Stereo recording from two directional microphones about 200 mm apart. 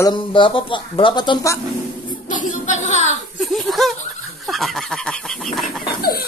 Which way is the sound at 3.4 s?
Centre (ahead or behind).